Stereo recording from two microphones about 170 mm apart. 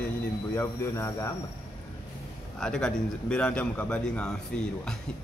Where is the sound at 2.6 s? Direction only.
5° left (ahead or behind).